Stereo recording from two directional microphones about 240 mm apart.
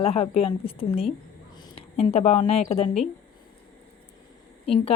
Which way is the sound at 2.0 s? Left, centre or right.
Left.